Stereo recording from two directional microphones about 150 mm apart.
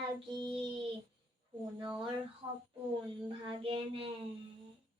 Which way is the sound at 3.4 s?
35° right (ahead or behind).